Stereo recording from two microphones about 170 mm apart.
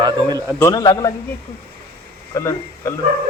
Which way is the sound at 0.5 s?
20° left (ahead or behind).